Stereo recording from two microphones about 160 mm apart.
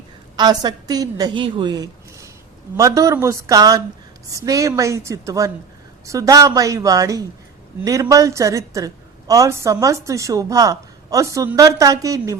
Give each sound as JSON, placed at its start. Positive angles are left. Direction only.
{"t": 0.3, "sound": "a woman's voice", "side_deg": -25}